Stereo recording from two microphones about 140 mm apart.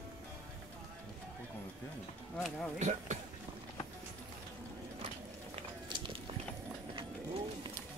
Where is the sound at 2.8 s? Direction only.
55° right (ahead or behind).